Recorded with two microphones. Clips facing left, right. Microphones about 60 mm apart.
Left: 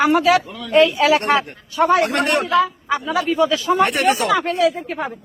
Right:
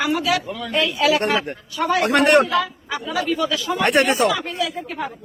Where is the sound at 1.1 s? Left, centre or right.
Left.